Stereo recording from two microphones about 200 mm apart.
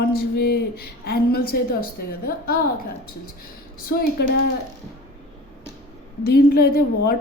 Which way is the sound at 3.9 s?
50° left (ahead or behind).